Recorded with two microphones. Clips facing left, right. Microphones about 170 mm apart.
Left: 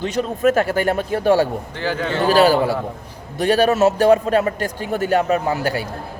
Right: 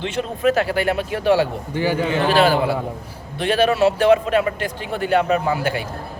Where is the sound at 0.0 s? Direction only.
40° left (ahead or behind).